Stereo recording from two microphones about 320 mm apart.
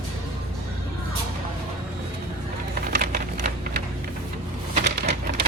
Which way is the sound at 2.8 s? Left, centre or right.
Right.